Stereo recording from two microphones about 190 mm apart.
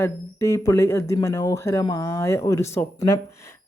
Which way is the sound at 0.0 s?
15° left (ahead or behind).